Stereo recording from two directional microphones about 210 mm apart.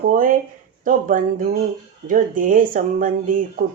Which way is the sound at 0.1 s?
40° right (ahead or behind).